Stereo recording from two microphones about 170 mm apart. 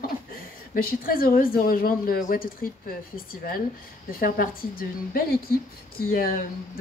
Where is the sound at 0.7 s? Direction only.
60° left (ahead or behind).